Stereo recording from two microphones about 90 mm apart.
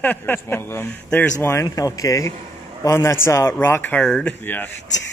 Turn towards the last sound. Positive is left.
turn(degrees=20)  # may be behind; listen again after turning